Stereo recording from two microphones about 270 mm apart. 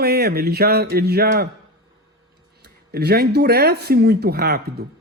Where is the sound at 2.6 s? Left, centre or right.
Right.